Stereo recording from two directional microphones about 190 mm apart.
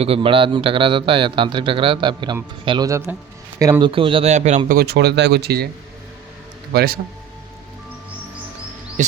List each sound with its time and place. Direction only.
0.0 s a man's voice: 30° right (ahead or behind)
4.8 s speech: 60° right (ahead or behind)
6.7 s speech: 50° right (ahead or behind)
9.0 s insect: 40° right (ahead or behind)